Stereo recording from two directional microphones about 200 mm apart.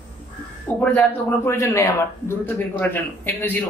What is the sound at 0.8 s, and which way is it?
A man's voice, 5° left (ahead or behind).